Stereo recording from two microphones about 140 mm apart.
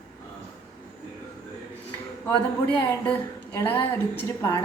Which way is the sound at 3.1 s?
15° left (ahead or behind).